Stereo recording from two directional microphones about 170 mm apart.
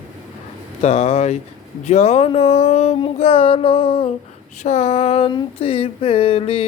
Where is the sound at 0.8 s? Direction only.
40° left (ahead or behind).